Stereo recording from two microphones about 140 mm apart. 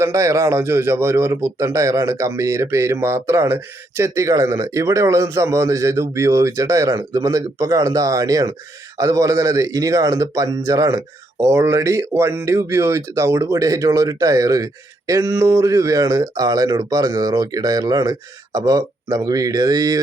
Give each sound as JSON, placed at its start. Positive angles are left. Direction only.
{"t": 0.0, "sound": "a man's voice", "side_deg": -20}